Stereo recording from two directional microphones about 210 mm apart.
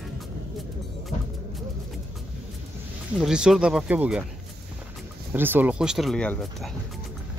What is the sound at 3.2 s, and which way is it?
Speech, 5° right (ahead or behind).